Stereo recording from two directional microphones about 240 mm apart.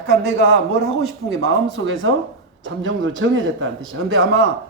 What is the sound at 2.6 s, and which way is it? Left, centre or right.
Speech, right.